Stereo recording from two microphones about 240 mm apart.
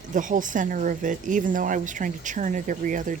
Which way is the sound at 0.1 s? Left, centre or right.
Right.